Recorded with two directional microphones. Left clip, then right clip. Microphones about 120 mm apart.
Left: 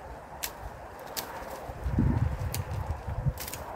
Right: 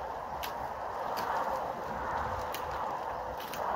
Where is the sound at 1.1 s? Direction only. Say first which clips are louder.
Right 6 dB; 25° left (ahead or behind).